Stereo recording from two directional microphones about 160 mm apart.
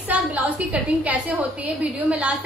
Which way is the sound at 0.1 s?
10° right (ahead or behind).